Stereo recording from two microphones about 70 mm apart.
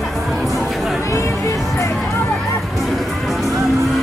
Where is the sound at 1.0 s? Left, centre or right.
Left.